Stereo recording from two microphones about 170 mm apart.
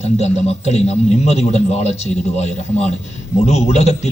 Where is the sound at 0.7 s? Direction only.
40° left (ahead or behind).